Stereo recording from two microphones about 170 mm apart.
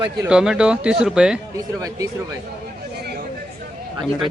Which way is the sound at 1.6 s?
20° right (ahead or behind).